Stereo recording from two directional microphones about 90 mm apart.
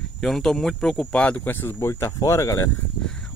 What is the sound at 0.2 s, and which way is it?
Speech, 5° left (ahead or behind).